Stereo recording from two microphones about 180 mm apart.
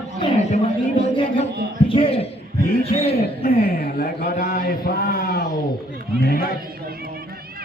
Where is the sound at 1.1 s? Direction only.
30° left (ahead or behind).